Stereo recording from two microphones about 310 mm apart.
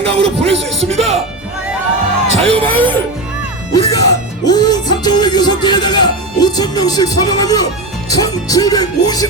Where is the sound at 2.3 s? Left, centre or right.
Centre.